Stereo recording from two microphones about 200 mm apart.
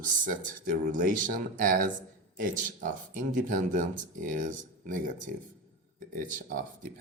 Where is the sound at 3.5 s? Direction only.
40° right (ahead or behind).